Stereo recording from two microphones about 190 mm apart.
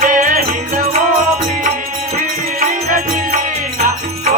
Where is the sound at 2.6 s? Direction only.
40° right (ahead or behind).